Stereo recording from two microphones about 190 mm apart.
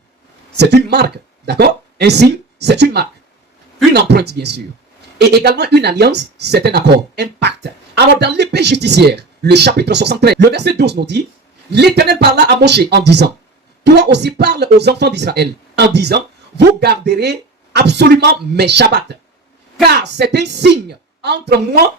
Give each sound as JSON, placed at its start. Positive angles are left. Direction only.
{"t": 0.5, "sound": "speech", "side_deg": -60}